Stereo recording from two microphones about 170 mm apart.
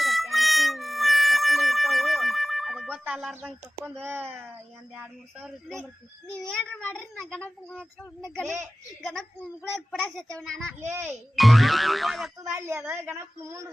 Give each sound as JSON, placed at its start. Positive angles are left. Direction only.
{"t": 0.0, "sound": "siren", "side_deg": 0}
{"t": 5.6, "sound": "a child's voice", "side_deg": 5}
{"t": 8.4, "sound": "a woman's voice", "side_deg": -15}
{"t": 9.9, "sound": "a child's voice", "side_deg": 5}
{"t": 12.5, "sound": "a woman's voice", "side_deg": -15}